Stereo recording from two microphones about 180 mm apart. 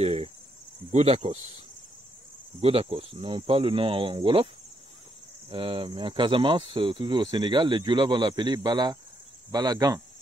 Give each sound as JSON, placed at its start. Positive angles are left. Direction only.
{"t": 0.0, "sound": "speech", "side_deg": -30}
{"t": 2.6, "sound": "speech", "side_deg": -30}
{"t": 5.5, "sound": "speech", "side_deg": -30}